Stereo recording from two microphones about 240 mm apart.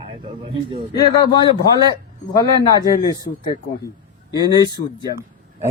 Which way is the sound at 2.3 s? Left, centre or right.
Centre.